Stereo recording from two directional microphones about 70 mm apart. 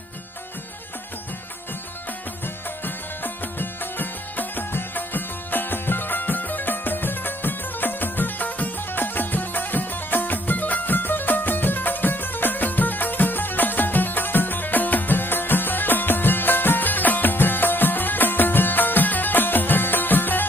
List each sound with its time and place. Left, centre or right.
2.8 s music: left